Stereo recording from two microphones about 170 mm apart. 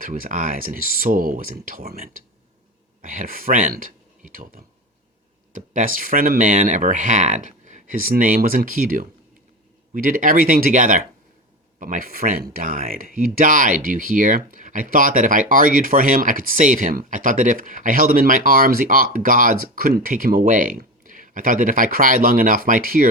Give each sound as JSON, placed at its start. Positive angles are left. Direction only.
{"t": 0.0, "sound": "speech", "side_deg": -50}
{"t": 3.0, "sound": "speech", "side_deg": -55}